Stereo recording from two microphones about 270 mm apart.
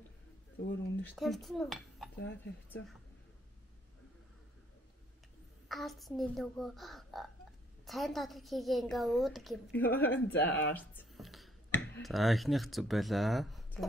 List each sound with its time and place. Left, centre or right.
0.6 s speech: left
1.0 s a woman's voice: centre
5.7 s a woman's voice: centre
10.7 s a sound: centre
12.0 s speech: centre